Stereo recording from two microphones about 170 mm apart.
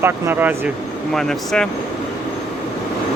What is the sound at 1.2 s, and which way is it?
Speech, 5° left (ahead or behind).